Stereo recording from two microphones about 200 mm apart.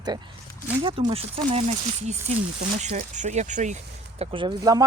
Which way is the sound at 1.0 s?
30° right (ahead or behind).